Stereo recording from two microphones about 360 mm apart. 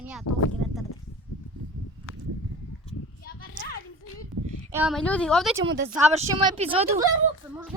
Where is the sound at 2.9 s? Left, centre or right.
Left.